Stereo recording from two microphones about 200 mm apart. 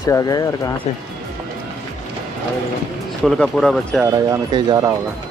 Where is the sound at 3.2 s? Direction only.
Centre (ahead or behind).